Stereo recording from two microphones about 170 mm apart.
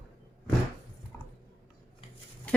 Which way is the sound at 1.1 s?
10° left (ahead or behind).